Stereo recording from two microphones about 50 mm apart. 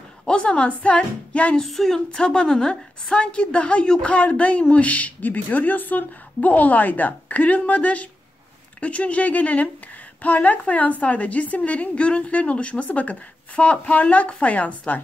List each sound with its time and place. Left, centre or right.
0.3 s a woman's voice: left
1.6 s a woman's voice: centre; by 15.0 s left